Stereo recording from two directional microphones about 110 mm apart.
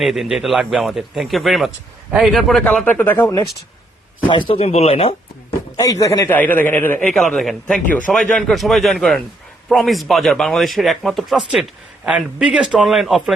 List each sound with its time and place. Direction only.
0.0 s speech: centre (ahead or behind)
2.8 s speech: 20° left (ahead or behind)
4.2 s a man's voice: 50° left (ahead or behind)
4.5 s speech: 75° left (ahead or behind); by 5.5 s 60° left (ahead or behind)
5.7 s a man's voice: 30° left (ahead or behind)
7.1 s speech: 5° left (ahead or behind)